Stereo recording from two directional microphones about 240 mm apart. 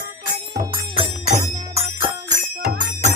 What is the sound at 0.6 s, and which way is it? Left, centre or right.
Music, right.